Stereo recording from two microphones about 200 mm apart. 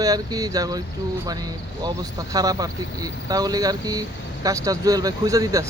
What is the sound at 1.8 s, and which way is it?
Speech, 20° right (ahead or behind).